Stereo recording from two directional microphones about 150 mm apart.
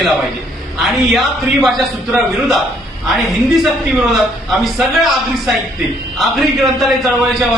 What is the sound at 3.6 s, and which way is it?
A man's voice, centre (ahead or behind).